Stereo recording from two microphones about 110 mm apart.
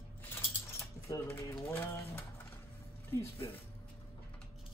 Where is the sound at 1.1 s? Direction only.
20° left (ahead or behind).